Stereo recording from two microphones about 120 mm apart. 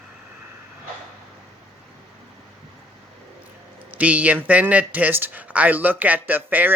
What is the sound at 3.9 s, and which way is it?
A man's voice, 10° right (ahead or behind).